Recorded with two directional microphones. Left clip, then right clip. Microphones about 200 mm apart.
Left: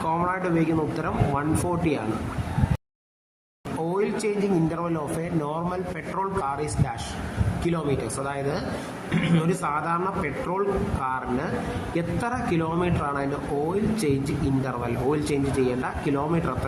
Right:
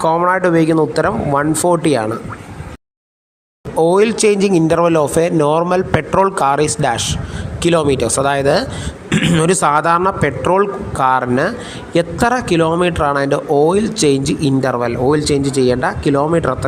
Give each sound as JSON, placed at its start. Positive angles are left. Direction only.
{"t": 0.0, "sound": "speech", "side_deg": -40}
{"t": 3.8, "sound": "speech", "side_deg": -45}